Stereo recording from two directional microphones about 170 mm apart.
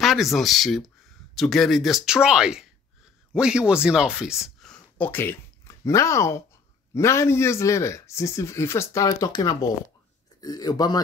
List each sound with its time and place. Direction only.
0.0 s speech: centre (ahead or behind); by 11.0 s 25° left (ahead or behind)